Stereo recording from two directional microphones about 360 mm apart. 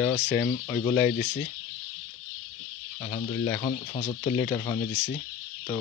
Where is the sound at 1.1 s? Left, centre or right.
Left.